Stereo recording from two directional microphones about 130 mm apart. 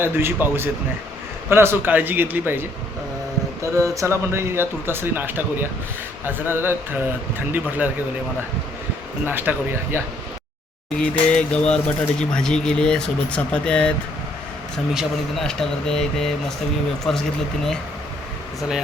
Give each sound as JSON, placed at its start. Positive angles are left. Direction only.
{"t": 0.0, "sound": "speech", "side_deg": -15}
{"t": 9.2, "sound": "speech", "side_deg": -15}
{"t": 10.9, "sound": "speech", "side_deg": 10}
{"t": 14.9, "sound": "speech", "side_deg": 5}